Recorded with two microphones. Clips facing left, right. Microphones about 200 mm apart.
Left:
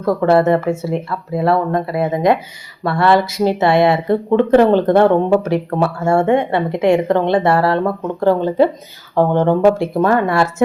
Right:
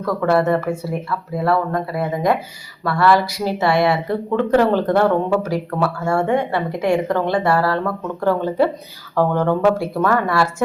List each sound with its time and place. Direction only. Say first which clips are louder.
0.0 s speech: left 4 dB; 25° left (ahead or behind)